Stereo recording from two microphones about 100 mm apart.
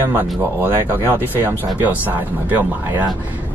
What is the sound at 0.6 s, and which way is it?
Speech, 20° right (ahead or behind).